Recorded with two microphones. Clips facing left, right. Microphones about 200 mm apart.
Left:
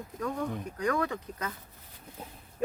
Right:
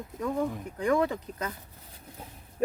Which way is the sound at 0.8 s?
25° right (ahead or behind).